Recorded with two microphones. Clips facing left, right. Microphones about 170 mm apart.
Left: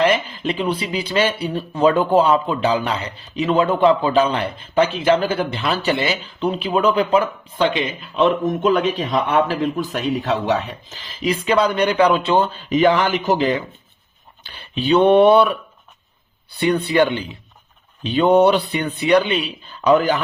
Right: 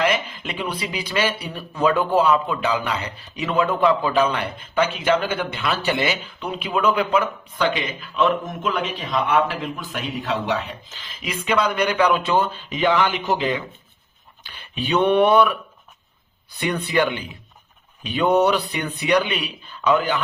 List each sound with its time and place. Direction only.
0.0 s speech: 30° left (ahead or behind)
12.7 s speech: 40° left (ahead or behind)